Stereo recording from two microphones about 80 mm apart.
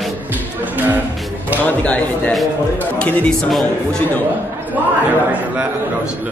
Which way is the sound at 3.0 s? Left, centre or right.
Centre.